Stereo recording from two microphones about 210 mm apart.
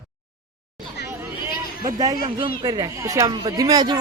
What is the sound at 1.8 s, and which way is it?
Speech, 20° right (ahead or behind).